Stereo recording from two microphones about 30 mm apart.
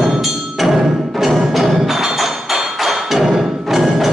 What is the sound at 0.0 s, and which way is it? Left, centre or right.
Music, centre.